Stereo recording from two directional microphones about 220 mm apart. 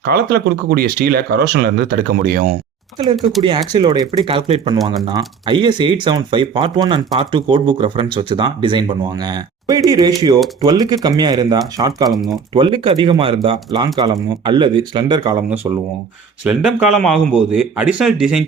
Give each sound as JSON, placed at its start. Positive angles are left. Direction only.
{"t": 0.0, "sound": "speech", "side_deg": -45}
{"t": 3.4, "sound": "speech", "side_deg": -20}
{"t": 16.4, "sound": "a man's voice", "side_deg": -5}